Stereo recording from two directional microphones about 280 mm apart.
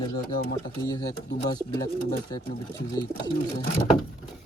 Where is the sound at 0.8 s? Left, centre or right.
Centre.